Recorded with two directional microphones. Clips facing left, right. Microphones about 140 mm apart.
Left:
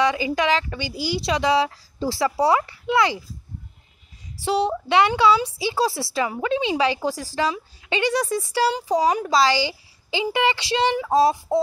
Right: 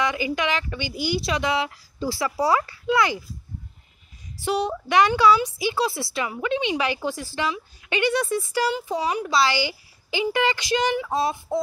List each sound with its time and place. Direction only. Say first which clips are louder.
0.0 s a woman's voice: left 4 dB; 30° left (ahead or behind)
4.5 s a woman's voice: left 3 dB; 30° left (ahead or behind)